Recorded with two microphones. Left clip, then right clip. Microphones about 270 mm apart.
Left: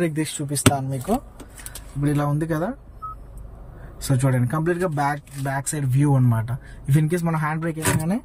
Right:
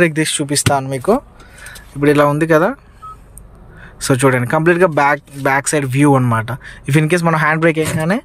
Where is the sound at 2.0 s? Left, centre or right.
Right.